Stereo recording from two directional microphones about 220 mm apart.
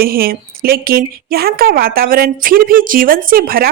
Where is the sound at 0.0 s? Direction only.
40° right (ahead or behind).